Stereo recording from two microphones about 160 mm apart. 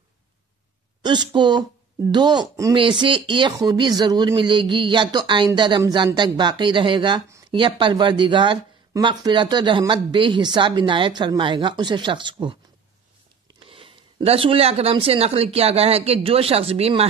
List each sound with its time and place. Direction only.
1.0 s speech: 30° right (ahead or behind)